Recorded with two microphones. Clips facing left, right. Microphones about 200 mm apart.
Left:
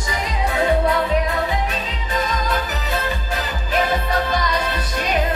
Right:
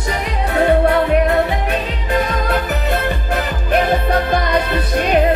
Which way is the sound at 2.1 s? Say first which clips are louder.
Right 5 dB; 60° right (ahead or behind).